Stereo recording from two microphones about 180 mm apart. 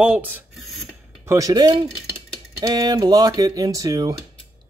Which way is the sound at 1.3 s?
20° right (ahead or behind).